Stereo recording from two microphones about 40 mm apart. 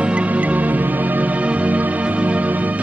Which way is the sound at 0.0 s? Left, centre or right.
Right.